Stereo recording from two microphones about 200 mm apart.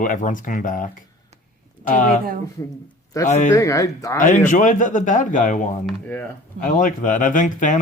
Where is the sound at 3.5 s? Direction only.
15° left (ahead or behind).